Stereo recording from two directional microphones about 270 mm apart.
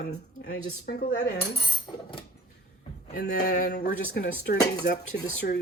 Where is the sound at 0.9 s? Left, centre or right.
Left.